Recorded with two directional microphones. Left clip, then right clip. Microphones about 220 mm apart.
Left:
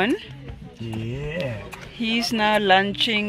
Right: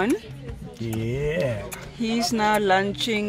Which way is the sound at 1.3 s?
5° left (ahead or behind).